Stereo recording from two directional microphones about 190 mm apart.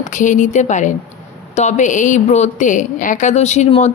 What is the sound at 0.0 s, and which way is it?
A woman's voice, 40° left (ahead or behind).